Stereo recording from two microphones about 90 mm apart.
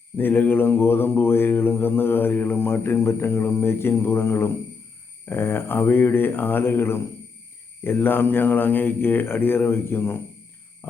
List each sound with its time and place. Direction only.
0.2 s mantra: 20° left (ahead or behind)